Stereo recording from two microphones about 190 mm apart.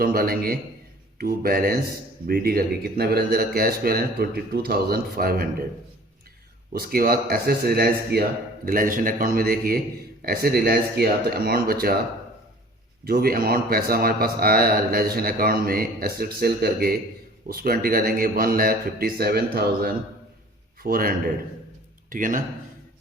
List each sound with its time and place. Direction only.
0.0 s a man's voice: 50° right (ahead or behind)
6.7 s a man's voice: 55° right (ahead or behind)
13.1 s a man's voice: 50° right (ahead or behind)
22.1 s a man's voice: 45° right (ahead or behind)